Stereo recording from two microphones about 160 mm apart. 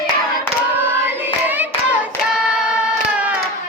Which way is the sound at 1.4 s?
10° right (ahead or behind).